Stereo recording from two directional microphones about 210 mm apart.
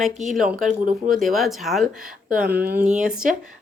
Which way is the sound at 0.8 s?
40° right (ahead or behind).